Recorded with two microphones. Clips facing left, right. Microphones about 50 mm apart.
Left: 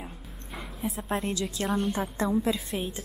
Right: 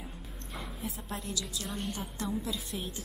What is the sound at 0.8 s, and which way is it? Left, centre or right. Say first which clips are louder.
A woman's voice: left 11 dB; left.